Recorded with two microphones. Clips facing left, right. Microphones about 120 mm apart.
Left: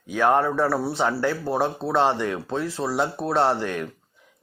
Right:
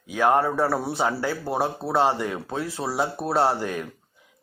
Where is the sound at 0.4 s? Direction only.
35° right (ahead or behind).